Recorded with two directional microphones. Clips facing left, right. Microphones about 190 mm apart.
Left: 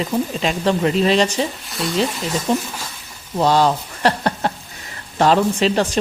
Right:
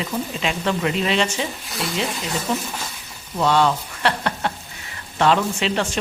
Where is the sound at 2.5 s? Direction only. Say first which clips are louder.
Left 4 dB; 30° left (ahead or behind).